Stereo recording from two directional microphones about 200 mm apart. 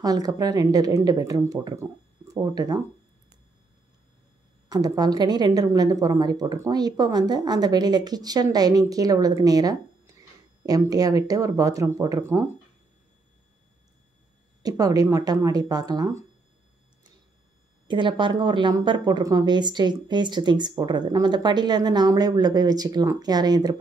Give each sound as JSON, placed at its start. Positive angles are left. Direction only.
{"t": 0.0, "sound": "speech", "side_deg": -20}
{"t": 4.6, "sound": "speech", "side_deg": -20}
{"t": 14.6, "sound": "speech", "side_deg": -20}
{"t": 17.8, "sound": "speech", "side_deg": -25}